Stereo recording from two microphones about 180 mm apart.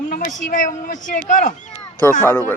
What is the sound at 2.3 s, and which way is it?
Speech, 10° left (ahead or behind).